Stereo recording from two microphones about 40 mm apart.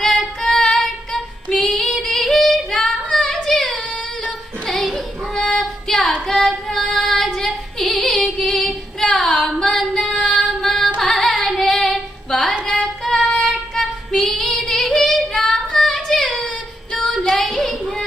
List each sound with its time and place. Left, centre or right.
0.0 s singing: centre
0.6 s child singing: centre
1.1 s female singing: centre
3.3 s child singing: centre
6.2 s singing: centre
6.9 s female singing: centre
7.4 s female singing: centre
9.1 s singing: centre
10.2 s female singing: centre
12.3 s a sound: centre
12.8 s singing: centre
13.5 s female singing: centre
15.7 s child singing: centre